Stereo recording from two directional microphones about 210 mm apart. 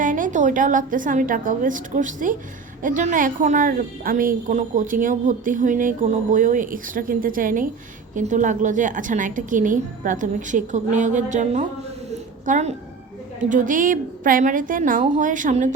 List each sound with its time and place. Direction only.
0.0 s a woman's voice: 40° right (ahead or behind)
12.1 s a sound: 35° right (ahead or behind)
13.5 s a woman's voice: 40° right (ahead or behind)